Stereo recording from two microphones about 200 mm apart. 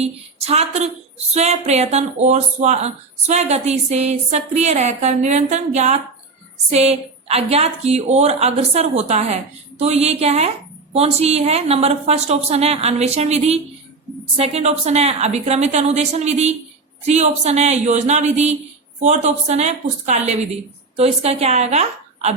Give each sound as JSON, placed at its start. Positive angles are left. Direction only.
{"t": 0.0, "sound": "a woman's voice", "side_deg": -30}